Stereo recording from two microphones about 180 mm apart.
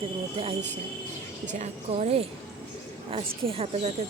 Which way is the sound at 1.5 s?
40° right (ahead or behind).